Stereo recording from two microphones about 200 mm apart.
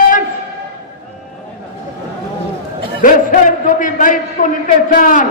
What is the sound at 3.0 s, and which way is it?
A man's voice, 40° left (ahead or behind).